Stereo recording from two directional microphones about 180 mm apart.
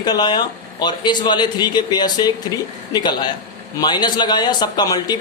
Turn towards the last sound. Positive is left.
turn(degrees=20)  # may be behind; listen again after turning